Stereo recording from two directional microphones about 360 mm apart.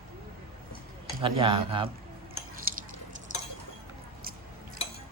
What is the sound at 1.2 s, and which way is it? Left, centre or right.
Speech, centre.